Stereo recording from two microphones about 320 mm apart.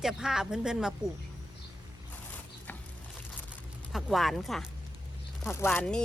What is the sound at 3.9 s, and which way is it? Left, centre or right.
Speech, centre.